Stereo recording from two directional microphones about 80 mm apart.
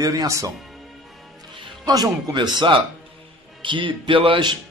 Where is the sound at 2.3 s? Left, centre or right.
Right.